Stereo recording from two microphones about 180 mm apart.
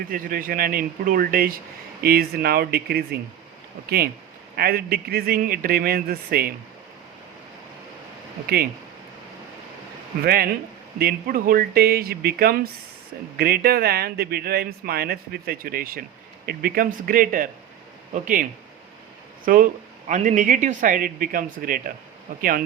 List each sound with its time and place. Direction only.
0.1 s speech: 50° right (ahead or behind)
10.2 s speech: 55° right (ahead or behind)
19.5 s speech: 50° right (ahead or behind)